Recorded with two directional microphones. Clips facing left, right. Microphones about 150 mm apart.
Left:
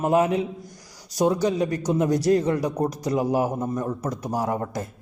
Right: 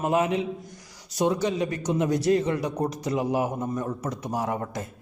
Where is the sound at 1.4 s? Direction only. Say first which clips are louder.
Left 3 dB; 40° left (ahead or behind).